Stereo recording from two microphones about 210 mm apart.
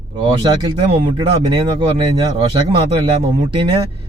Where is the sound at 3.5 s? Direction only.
25° right (ahead or behind).